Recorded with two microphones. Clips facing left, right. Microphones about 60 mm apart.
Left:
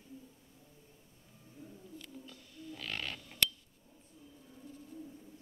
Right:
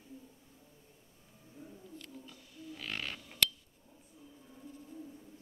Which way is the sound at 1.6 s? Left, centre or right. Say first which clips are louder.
Right 1 dB; centre.